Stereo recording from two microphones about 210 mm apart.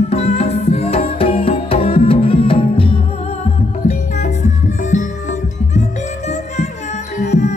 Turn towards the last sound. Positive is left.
turn(degrees=30)  # may be behind; listen again after turning